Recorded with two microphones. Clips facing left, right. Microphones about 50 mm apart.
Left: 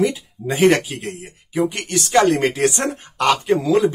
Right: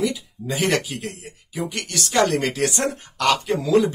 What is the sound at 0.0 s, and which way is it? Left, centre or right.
Speech, left.